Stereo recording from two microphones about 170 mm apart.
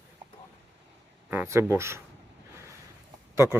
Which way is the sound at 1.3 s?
15° right (ahead or behind).